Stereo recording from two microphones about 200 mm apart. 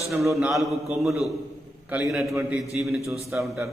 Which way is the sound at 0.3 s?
Centre (ahead or behind).